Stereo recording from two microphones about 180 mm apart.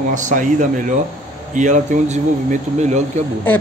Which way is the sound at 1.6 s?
45° right (ahead or behind).